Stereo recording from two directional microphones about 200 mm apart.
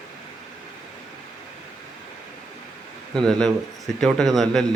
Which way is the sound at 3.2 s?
5° left (ahead or behind).